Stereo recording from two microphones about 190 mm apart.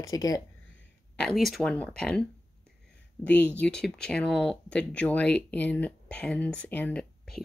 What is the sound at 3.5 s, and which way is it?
Speech, 5° left (ahead or behind).